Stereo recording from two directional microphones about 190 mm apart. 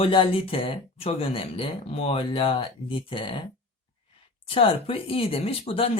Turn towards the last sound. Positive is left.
turn(degrees=30)  # may be behind; listen again after turning